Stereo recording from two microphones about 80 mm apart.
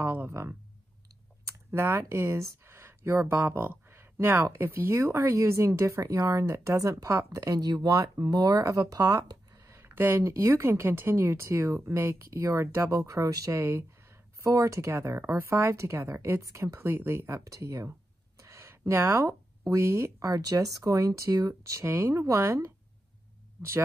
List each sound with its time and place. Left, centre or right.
0.0 s a sound: right
1.4 s speech: right
9.8 s speech: right
13.5 s speech: right
16.3 s speech: right
16.7 s speech: right
17.6 s speech: right
18.4 s a sound: right
19.7 s speech: right
21.8 s speech: right